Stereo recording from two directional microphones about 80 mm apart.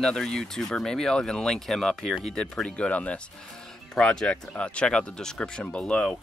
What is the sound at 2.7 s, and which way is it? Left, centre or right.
Speech, centre.